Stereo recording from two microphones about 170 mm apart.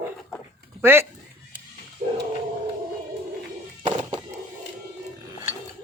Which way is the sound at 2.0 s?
45° right (ahead or behind).